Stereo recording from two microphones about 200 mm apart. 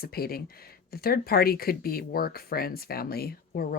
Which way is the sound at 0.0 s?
50° left (ahead or behind).